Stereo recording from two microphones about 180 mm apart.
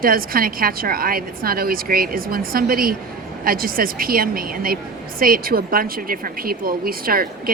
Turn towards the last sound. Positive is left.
turn(degrees=-55)  # may be behind; listen again after turning